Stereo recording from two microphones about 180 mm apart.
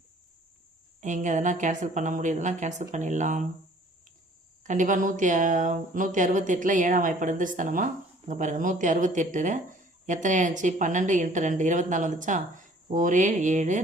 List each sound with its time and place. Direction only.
1.0 s speech: 45° right (ahead or behind)
4.6 s speech: 45° right (ahead or behind)